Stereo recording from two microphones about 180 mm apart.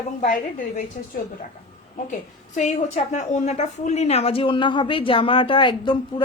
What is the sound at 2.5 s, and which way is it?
Speech, 40° left (ahead or behind).